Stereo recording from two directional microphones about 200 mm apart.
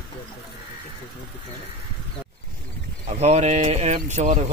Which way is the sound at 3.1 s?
35° right (ahead or behind).